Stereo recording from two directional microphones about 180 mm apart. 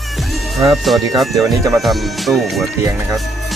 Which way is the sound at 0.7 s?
Centre (ahead or behind).